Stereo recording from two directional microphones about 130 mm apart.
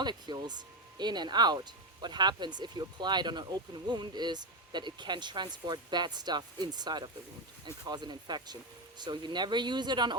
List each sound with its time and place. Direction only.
0.0 s speech: 35° right (ahead or behind)